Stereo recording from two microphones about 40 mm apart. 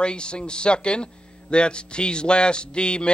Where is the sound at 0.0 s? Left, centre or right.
Left.